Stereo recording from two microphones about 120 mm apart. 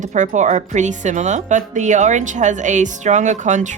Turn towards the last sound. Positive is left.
turn(degrees=-90)